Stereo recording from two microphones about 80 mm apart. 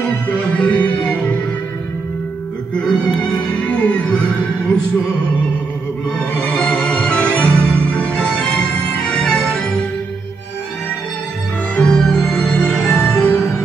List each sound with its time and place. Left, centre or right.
0.6 s music: centre
2.7 s music: centre
6.1 s music: centre
11.7 s music: centre